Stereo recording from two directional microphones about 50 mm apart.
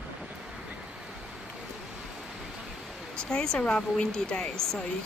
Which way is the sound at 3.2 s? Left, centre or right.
Centre.